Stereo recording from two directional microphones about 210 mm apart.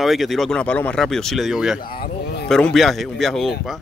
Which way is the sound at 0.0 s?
Centre (ahead or behind).